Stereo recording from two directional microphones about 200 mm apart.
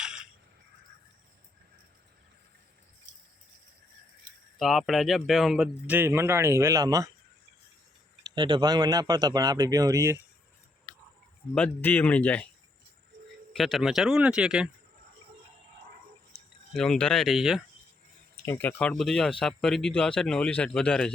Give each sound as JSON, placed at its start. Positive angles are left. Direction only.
{"t": 0.0, "sound": "a sound", "side_deg": -5}
{"t": 4.5, "sound": "speech", "side_deg": 0}
{"t": 8.4, "sound": "speech", "side_deg": -20}
{"t": 11.5, "sound": "speech", "side_deg": 10}
{"t": 13.5, "sound": "speech", "side_deg": 0}
{"t": 16.7, "sound": "speech", "side_deg": 5}
{"t": 18.4, "sound": "speech", "side_deg": 10}